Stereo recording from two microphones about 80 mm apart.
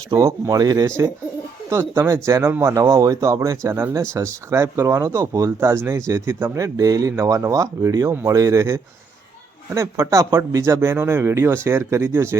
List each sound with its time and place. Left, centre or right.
0.1 s speech: right
0.5 s speech: right